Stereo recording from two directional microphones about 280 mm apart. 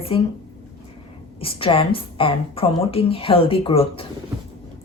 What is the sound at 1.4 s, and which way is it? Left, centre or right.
A woman's voice, centre.